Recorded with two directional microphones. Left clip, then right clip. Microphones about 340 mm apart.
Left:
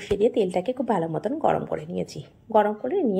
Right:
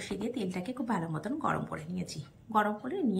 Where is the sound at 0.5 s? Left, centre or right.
Left.